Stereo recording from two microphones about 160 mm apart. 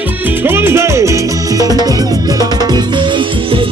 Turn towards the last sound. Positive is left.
turn(degrees=-30)  # may be behind; listen again after turning